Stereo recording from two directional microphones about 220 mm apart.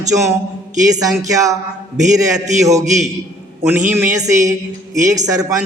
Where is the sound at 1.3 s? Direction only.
15° right (ahead or behind).